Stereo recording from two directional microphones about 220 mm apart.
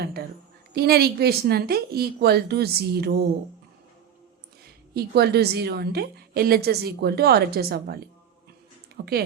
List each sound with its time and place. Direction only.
0.0 s a sound: 45° right (ahead or behind)
0.7 s a woman's voice: 45° right (ahead or behind)
4.6 s a woman's voice: 45° right (ahead or behind)